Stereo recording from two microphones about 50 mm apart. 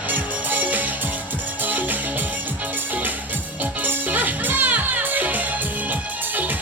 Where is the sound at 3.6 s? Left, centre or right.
Right.